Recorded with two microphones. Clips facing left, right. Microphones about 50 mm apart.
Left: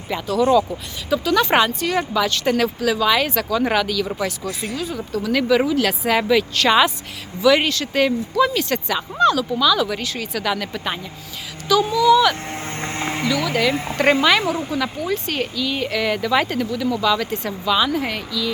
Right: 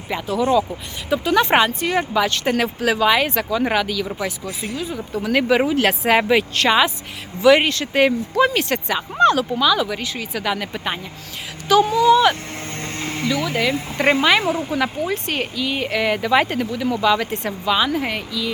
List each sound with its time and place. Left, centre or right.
0.1 s speech: centre
1.1 s speech: right
3.1 s speech: right
5.2 s speech: right
6.7 s speech: centre
7.4 s speech: right
9.6 s speech: right
9.9 s speech: centre
11.7 s speech: right
12.5 s music: left
13.2 s speech: centre
14.7 s speech: right
17.7 s speech: right